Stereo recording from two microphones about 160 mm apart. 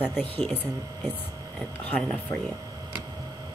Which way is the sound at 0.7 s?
25° right (ahead or behind).